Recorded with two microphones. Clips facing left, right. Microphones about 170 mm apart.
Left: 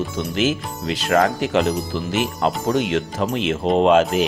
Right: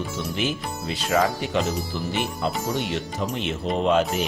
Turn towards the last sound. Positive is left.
turn(degrees=90)